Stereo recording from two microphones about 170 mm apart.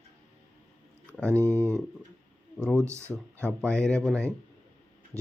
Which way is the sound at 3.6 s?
5° left (ahead or behind).